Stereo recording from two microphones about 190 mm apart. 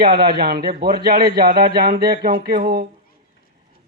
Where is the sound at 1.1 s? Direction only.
55° right (ahead or behind).